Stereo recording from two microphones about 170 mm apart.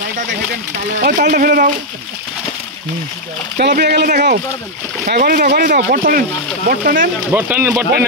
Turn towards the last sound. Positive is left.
turn(degrees=-10)  # may be behind; listen again after turning